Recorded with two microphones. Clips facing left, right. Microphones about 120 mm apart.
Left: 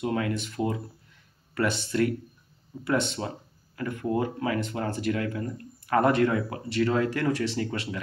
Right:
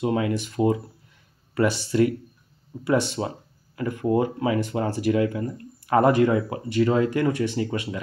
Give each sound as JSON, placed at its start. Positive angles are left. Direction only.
{"t": 0.0, "sound": "speech", "side_deg": -15}